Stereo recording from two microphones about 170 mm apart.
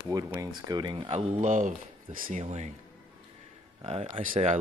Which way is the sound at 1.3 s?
45° right (ahead or behind).